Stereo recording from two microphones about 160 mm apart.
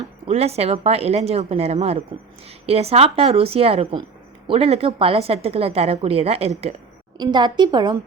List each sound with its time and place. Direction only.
0.3 s a woman's voice: 40° right (ahead or behind)
7.2 s a woman's voice: 25° right (ahead or behind)